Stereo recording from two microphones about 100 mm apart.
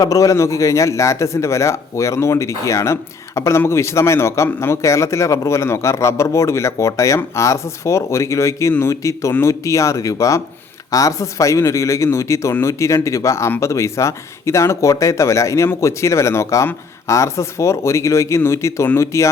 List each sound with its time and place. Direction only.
0.0 s a man's voice: 35° left (ahead or behind)